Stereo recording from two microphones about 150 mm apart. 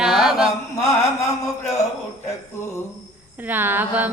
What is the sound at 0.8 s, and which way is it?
Mantra, 20° left (ahead or behind).